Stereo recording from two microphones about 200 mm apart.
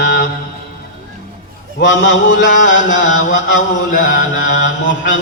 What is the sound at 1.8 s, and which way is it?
Mantra, 70° left (ahead or behind).